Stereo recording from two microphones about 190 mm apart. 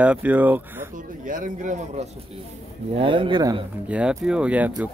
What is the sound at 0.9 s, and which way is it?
Speech, 45° right (ahead or behind).